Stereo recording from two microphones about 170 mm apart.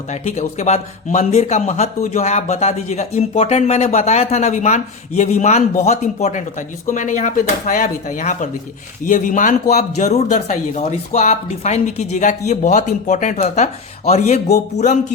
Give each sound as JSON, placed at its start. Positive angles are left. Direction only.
{"t": 0.1, "sound": "speech", "side_deg": 45}